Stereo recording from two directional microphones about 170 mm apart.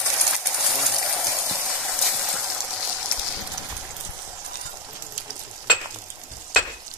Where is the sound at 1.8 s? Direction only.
Centre (ahead or behind).